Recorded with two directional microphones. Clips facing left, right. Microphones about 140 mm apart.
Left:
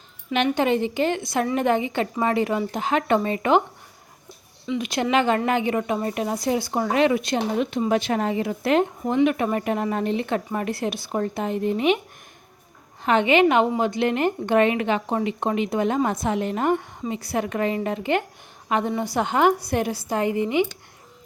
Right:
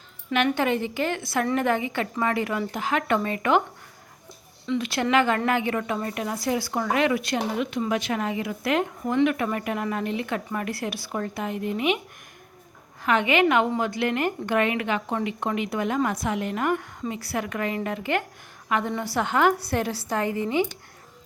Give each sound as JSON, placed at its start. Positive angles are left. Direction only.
{"t": 0.3, "sound": "a woman's voice", "side_deg": 20}
{"t": 4.6, "sound": "a woman's voice", "side_deg": 15}
{"t": 7.5, "sound": "a woman's voice", "side_deg": 35}
{"t": 13.0, "sound": "a woman's voice", "side_deg": 25}